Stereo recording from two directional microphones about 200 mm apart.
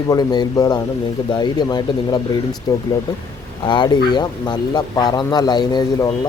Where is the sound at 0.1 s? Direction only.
20° left (ahead or behind).